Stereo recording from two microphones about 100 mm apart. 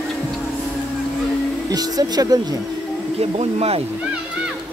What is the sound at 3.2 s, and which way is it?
Speech, 90° right.